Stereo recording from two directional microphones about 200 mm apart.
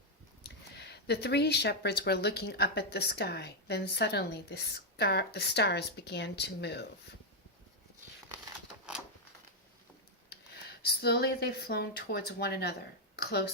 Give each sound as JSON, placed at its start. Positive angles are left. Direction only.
{"t": 0.4, "sound": "speech", "side_deg": 55}
{"t": 10.2, "sound": "speech", "side_deg": 55}